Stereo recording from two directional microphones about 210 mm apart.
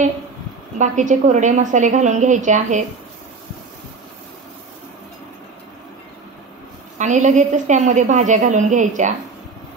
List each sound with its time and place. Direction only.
0.7 s a woman's voice: 35° right (ahead or behind)
7.0 s a woman's voice: 35° right (ahead or behind)